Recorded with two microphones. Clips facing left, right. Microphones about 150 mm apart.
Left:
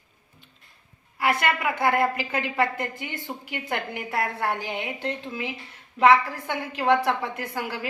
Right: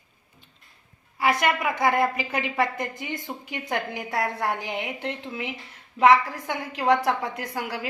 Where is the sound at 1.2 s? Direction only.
15° right (ahead or behind).